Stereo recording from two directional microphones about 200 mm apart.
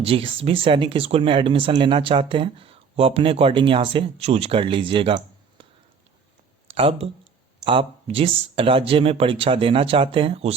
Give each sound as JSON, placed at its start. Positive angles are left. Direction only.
{"t": 0.0, "sound": "speech", "side_deg": -25}
{"t": 6.7, "sound": "speech", "side_deg": -30}